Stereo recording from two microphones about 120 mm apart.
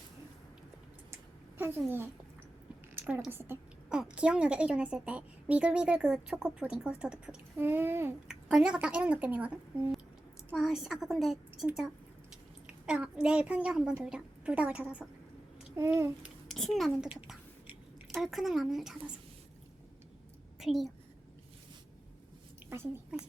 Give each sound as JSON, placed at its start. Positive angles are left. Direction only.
{"t": 1.1, "sound": "a sound", "side_deg": -20}
{"t": 3.0, "sound": "a woman's voice", "side_deg": -5}
{"t": 3.2, "sound": "a woman's voice", "side_deg": -20}
{"t": 3.8, "sound": "a woman's voice", "side_deg": -5}
{"t": 8.3, "sound": "a woman's voice", "side_deg": -5}
{"t": 12.6, "sound": "a child's voice", "side_deg": -10}
{"t": 15.7, "sound": "babbling", "side_deg": -20}
{"t": 16.5, "sound": "speech", "side_deg": 0}
{"t": 17.1, "sound": "speech", "side_deg": -10}
{"t": 20.6, "sound": "a woman's voice", "side_deg": 0}
{"t": 22.7, "sound": "a woman's voice", "side_deg": -20}